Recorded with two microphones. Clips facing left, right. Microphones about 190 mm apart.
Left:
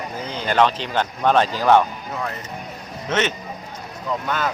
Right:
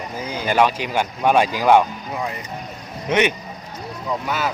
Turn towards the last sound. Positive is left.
turn(degrees=-10)  # may be behind; listen again after turning